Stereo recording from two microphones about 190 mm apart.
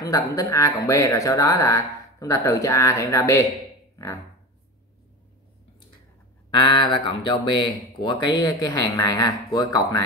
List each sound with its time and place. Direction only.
0.0 s speech: 15° left (ahead or behind)
6.5 s speech: 25° left (ahead or behind)